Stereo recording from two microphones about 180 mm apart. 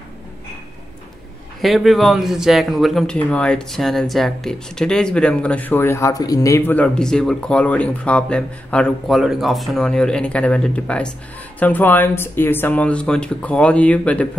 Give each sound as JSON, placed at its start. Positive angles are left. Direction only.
{"t": 1.6, "sound": "speech", "side_deg": 0}